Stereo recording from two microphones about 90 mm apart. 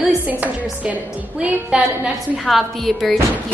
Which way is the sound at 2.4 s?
Centre (ahead or behind).